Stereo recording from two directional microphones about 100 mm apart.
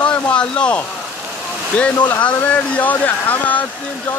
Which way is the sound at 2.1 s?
15° left (ahead or behind).